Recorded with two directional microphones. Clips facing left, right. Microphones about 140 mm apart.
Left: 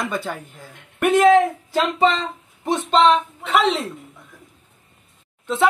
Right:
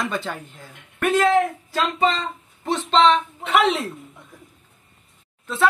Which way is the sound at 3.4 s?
Centre (ahead or behind).